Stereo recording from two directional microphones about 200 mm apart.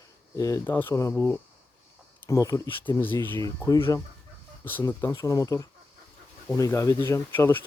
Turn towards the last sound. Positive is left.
turn(degrees=10)  # may be behind; listen again after turning